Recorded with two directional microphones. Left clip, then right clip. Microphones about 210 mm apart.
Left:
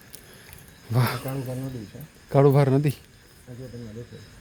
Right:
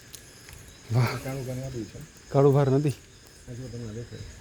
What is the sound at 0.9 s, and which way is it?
Speech, 10° left (ahead or behind).